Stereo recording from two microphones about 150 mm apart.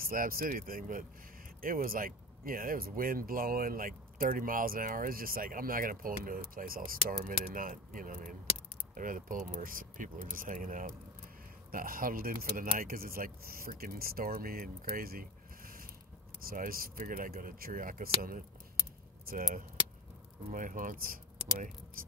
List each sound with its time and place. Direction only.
0.0 s speech: 70° right (ahead or behind)
19.2 s speech: 70° right (ahead or behind)